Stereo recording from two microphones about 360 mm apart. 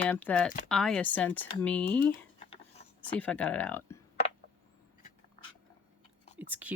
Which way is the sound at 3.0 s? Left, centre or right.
Centre.